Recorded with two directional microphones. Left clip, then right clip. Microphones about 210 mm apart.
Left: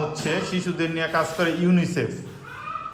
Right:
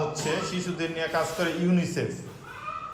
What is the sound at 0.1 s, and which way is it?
A man's voice, 5° right (ahead or behind).